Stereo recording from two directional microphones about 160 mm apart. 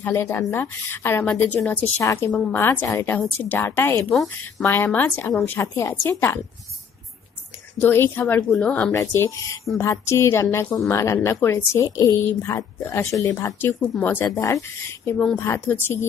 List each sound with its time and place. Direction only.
0.0 s a woman's voice: 15° left (ahead or behind)
4.1 s speech: centre (ahead or behind)
4.6 s a woman's voice: 15° left (ahead or behind)
7.8 s a woman's voice: 15° left (ahead or behind)
8.9 s a woman's voice: 20° left (ahead or behind)